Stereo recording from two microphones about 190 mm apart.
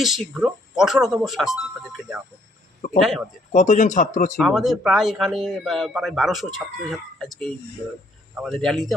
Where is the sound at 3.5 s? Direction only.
40° left (ahead or behind).